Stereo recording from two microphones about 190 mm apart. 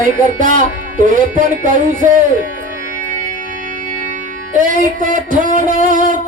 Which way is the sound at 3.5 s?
45° right (ahead or behind).